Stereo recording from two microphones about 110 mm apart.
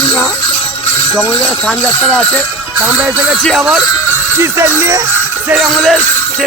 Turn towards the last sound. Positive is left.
turn(degrees=0)  # may be behind; listen again after turning